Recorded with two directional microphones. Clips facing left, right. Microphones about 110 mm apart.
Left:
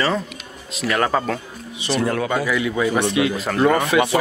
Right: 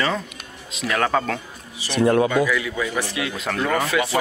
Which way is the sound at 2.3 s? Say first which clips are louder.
Even; 30° left (ahead or behind).